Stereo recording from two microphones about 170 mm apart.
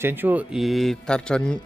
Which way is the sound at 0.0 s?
10° right (ahead or behind).